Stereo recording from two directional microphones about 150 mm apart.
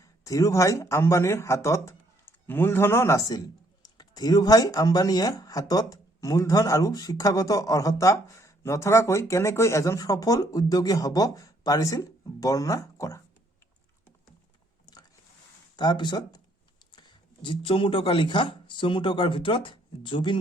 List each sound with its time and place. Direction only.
0.0 s speech: 20° left (ahead or behind)
15.7 s speech: 30° left (ahead or behind)